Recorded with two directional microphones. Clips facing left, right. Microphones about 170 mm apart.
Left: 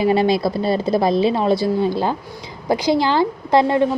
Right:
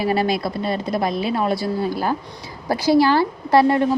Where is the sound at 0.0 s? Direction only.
20° left (ahead or behind).